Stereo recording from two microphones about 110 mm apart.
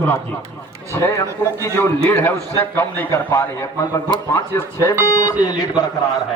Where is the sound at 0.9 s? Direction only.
25° left (ahead or behind).